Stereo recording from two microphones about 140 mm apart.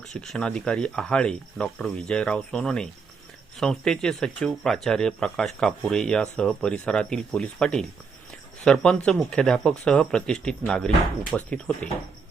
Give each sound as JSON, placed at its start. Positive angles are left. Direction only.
{"t": 0.1, "sound": "speech", "side_deg": 5}